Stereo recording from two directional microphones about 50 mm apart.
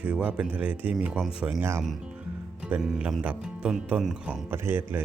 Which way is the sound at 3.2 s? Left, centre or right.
Right.